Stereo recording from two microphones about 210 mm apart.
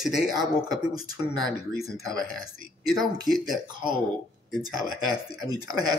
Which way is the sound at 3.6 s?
20° right (ahead or behind).